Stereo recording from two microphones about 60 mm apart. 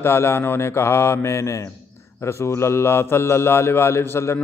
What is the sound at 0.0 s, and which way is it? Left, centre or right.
A man's voice, left.